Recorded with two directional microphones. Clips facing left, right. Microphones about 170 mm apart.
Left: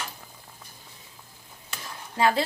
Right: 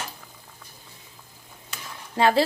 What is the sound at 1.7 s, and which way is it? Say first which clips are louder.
Stir: right 3 dB; 30° right (ahead or behind).